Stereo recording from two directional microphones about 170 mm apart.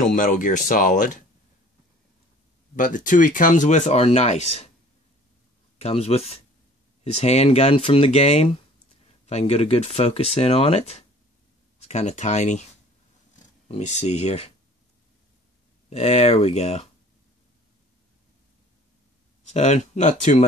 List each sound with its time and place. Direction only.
0.0 s speech: 50° left (ahead or behind)
2.7 s speech: 50° left (ahead or behind)
5.8 s speech: 35° left (ahead or behind)
13.7 s speech: 45° left (ahead or behind)
15.9 s speech: 40° left (ahead or behind)
19.5 s speech: 45° left (ahead or behind)